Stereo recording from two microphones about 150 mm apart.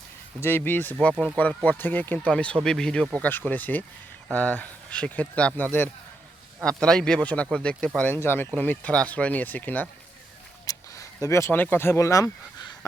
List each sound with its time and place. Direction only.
0.4 s speech: 15° left (ahead or behind)
10.7 s speech: 20° left (ahead or behind)